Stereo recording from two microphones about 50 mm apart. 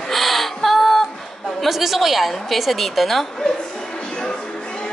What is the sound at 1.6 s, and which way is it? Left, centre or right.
A woman's voice, centre.